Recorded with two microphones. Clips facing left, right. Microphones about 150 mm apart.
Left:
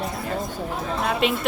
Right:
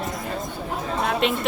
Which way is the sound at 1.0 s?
Centre (ahead or behind).